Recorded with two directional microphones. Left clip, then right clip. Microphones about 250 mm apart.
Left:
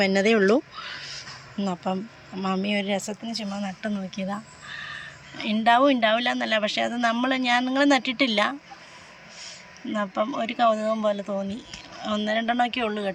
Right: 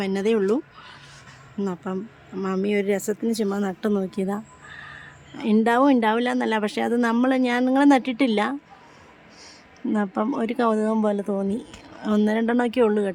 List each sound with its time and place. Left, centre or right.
0.0 s a woman's voice: centre
9.9 s a woman's voice: centre